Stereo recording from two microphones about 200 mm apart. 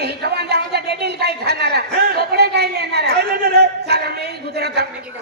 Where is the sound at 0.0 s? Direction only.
55° right (ahead or behind).